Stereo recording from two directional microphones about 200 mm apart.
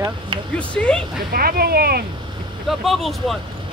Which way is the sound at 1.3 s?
45° right (ahead or behind).